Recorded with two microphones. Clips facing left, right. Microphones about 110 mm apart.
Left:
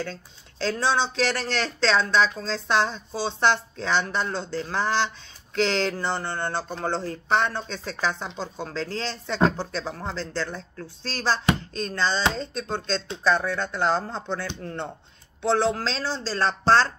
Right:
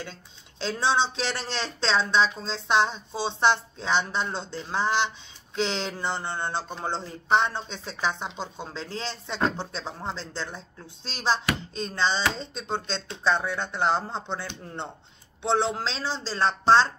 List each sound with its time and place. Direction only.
0.0 s speech: 20° right (ahead or behind)